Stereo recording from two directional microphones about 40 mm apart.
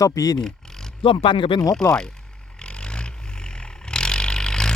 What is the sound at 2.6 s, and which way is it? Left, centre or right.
Vehicle, left.